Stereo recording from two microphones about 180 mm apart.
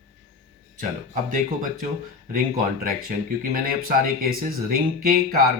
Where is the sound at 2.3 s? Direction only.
55° right (ahead or behind).